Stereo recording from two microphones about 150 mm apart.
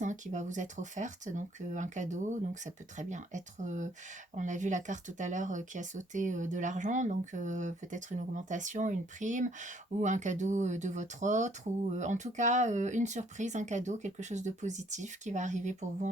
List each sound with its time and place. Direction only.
0.0 s speech: 55° right (ahead or behind)